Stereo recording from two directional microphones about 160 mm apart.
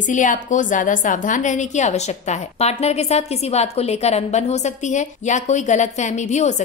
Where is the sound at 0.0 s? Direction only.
50° left (ahead or behind).